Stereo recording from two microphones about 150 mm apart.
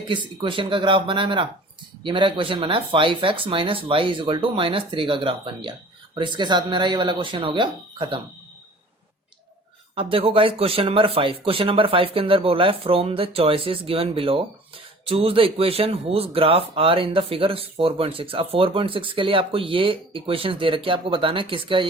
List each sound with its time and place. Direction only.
0.1 s speech: 35° right (ahead or behind)
9.9 s speech: 35° right (ahead or behind)